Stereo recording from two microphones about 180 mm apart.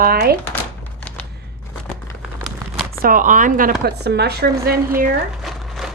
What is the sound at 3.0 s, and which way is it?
Speech, 50° right (ahead or behind).